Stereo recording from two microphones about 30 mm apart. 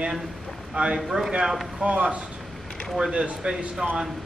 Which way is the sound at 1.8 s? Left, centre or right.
Right.